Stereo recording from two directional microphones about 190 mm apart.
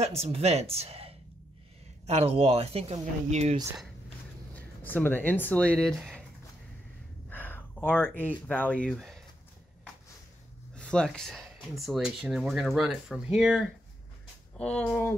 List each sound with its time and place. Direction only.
0.0 s speech: 35° right (ahead or behind)
4.6 s speech: 10° left (ahead or behind)
7.2 s a sound: 10° left (ahead or behind)
8.2 s speech: 10° left (ahead or behind)
10.7 s speech: 5° left (ahead or behind)